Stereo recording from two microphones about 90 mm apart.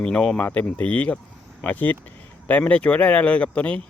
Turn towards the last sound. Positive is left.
turn(degrees=15)  # may be behind; listen again after turning